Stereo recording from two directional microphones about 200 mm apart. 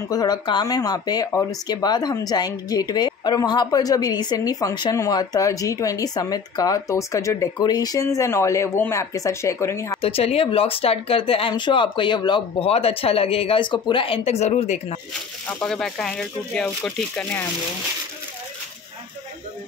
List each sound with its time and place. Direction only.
0.1 s speech: 20° left (ahead or behind)
10.0 s speech: 30° left (ahead or behind)
15.6 s speech: centre (ahead or behind)